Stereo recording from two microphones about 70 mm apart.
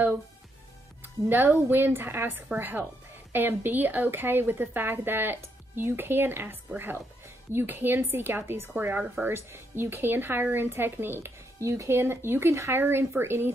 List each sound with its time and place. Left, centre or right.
1.3 s speech: right